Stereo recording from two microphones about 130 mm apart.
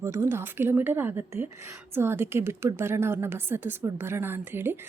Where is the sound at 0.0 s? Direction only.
20° right (ahead or behind).